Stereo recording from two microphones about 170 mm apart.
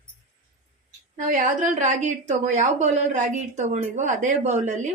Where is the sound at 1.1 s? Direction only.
50° right (ahead or behind).